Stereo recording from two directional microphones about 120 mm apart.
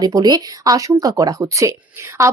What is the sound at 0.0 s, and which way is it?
Speech, 35° right (ahead or behind).